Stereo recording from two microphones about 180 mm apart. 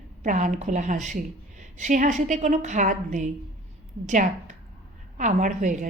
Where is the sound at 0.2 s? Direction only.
45° right (ahead or behind).